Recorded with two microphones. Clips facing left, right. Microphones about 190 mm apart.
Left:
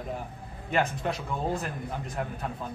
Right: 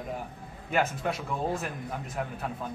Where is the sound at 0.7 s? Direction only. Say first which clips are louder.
Even; centre (ahead or behind).